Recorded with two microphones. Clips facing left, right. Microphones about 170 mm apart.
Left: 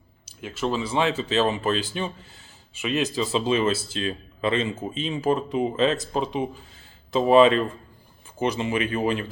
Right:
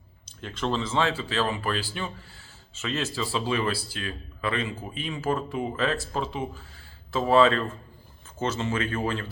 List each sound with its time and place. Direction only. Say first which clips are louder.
0.3 s speech: left 2 dB; 5° left (ahead or behind)